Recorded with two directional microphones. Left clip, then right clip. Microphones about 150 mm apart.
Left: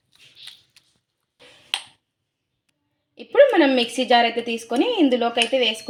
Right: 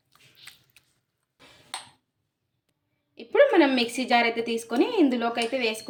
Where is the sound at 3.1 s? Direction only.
30° left (ahead or behind).